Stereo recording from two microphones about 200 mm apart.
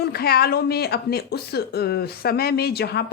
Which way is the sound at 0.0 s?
50° left (ahead or behind).